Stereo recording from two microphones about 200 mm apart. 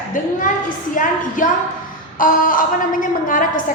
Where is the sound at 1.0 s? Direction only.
40° left (ahead or behind).